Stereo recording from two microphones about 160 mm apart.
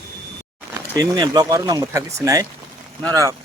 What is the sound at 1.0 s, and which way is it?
Speech, 25° right (ahead or behind).